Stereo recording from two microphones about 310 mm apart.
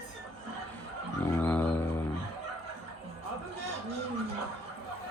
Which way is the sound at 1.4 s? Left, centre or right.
Centre.